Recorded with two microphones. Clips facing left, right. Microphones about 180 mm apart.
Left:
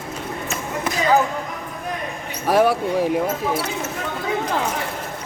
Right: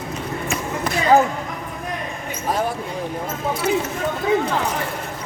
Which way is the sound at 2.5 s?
75° left (ahead or behind).